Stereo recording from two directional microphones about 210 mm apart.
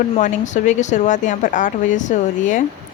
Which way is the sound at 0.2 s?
35° left (ahead or behind).